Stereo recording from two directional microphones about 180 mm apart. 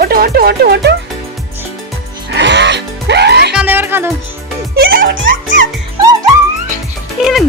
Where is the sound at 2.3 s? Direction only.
75° right (ahead or behind).